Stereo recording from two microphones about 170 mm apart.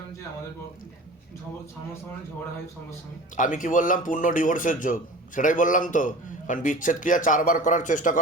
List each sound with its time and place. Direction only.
3.3 s a man's voice: 50° left (ahead or behind)